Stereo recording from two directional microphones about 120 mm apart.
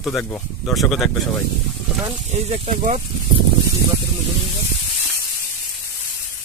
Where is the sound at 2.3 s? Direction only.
70° right (ahead or behind).